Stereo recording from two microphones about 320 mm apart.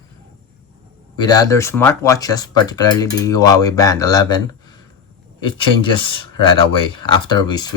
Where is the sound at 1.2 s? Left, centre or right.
Centre.